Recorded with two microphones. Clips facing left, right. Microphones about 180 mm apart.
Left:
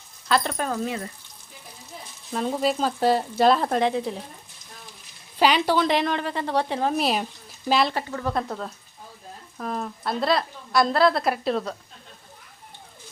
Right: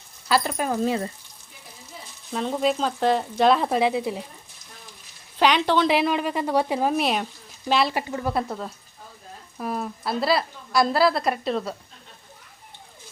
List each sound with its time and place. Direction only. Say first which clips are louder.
0.3 s speech: right 1 dB; 5° right (ahead or behind)
0.9 s speech: right 5 dB; 30° right (ahead or behind)
2.3 s a woman's voice: right 1 dB; 5° left (ahead or behind)
5.4 s a woman's voice: even; 5° left (ahead or behind)
5.9 s a woman's voice: right 2 dB; 5° right (ahead or behind)
7.9 s a woman's voice: right 1 dB; 10° right (ahead or behind)